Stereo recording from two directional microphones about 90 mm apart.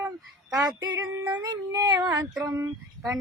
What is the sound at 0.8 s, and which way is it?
Female singing, 45° right (ahead or behind).